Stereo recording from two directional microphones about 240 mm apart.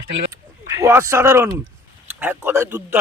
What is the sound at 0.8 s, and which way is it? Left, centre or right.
A man's voice, centre.